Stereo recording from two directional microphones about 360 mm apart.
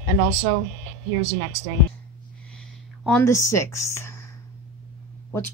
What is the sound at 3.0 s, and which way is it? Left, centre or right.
Speech, centre.